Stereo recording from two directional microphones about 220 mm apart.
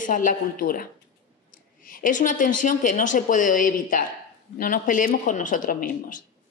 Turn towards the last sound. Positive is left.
turn(degrees=40)  # may be behind; listen again after turning